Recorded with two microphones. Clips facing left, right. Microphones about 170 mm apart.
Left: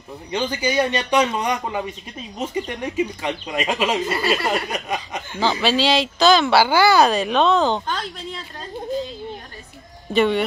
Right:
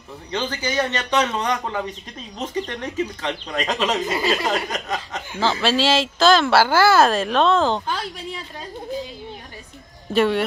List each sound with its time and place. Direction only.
0.3 s a man's voice: 10° left (ahead or behind)
4.0 s speech: 15° right (ahead or behind)
4.5 s a man's voice: 10° left (ahead or behind)
5.3 s speech: centre (ahead or behind)
10.1 s speech: centre (ahead or behind)